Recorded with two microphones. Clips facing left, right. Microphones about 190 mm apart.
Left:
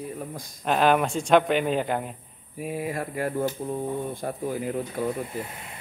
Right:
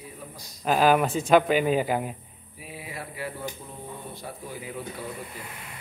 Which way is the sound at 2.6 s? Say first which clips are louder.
Left 10 dB; 50° left (ahead or behind).